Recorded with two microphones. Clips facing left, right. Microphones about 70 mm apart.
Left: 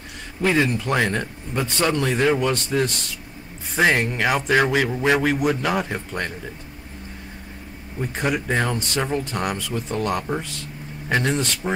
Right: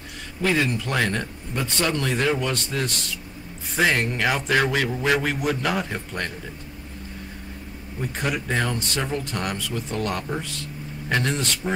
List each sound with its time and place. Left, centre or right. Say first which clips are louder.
0.4 s a man's voice: left 3 dB; centre
8.0 s a man's voice: left 3 dB; centre